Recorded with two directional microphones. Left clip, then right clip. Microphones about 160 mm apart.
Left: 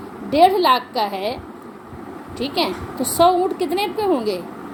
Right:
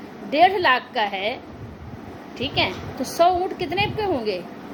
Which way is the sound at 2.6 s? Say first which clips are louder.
Left 3 dB; 15° left (ahead or behind).